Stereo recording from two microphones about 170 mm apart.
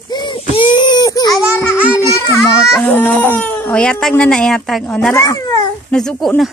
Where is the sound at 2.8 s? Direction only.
10° left (ahead or behind).